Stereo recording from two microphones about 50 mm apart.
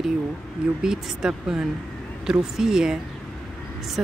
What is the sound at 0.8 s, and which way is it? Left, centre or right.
Speech, centre.